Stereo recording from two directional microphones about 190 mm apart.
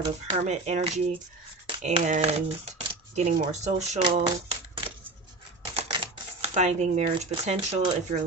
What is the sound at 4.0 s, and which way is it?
Shuffling cards, 25° right (ahead or behind).